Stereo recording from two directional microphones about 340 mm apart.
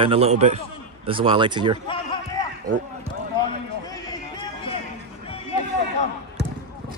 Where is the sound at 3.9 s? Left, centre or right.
Centre.